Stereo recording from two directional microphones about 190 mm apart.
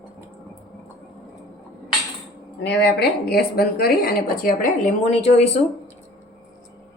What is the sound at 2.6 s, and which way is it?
Speech, 60° left (ahead or behind).